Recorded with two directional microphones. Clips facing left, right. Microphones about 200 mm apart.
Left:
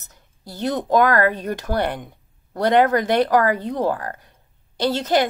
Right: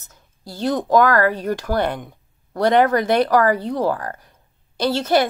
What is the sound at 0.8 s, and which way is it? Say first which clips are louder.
A woman's voice: right 1 dB; 20° left (ahead or behind).